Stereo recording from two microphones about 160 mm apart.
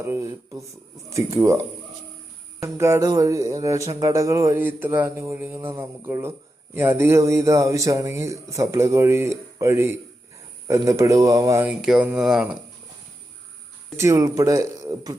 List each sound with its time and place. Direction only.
0.0 s speech: 15° right (ahead or behind)
13.9 s speech: 20° right (ahead or behind)